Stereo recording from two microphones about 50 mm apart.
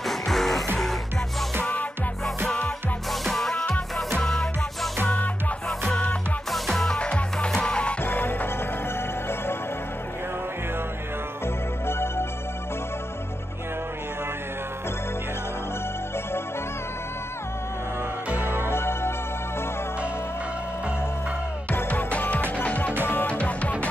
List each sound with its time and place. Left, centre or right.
0.0 s music: centre
2.2 s music: centre
5.7 s music: centre
6.9 s music: left
8.0 s music: left
11.4 s music: left
18.3 s music: right
18.7 s music: left
21.8 s music: left